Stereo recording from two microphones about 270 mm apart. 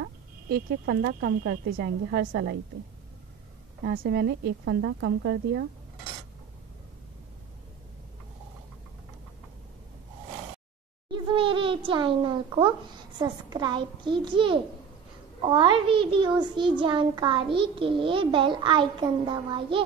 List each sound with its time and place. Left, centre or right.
0.0 s speech: right
3.8 s a woman's voice: right
11.1 s a sound: centre
13.2 s a child's voice: centre